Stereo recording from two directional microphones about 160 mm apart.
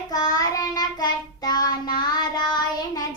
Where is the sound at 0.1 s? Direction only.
25° left (ahead or behind).